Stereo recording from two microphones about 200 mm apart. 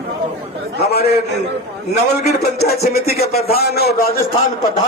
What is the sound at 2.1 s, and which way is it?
Speech, 55° left (ahead or behind).